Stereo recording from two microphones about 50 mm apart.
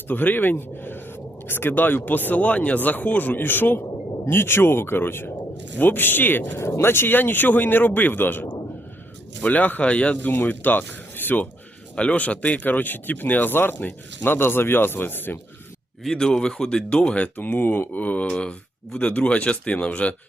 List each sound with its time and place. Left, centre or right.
0.1 s speech: left
6.6 s speech: left
9.4 s speech: left
10.2 s speech: left
11.9 s speech: left
13.7 s speech: left
14.3 s speech: left
16.1 s speech: centre
17.3 s speech: left